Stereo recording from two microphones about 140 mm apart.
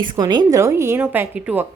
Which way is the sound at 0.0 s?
30° right (ahead or behind).